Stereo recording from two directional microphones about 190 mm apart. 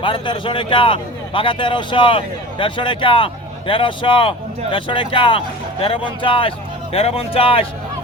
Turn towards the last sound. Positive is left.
turn(degrees=30)  # may be behind; listen again after turning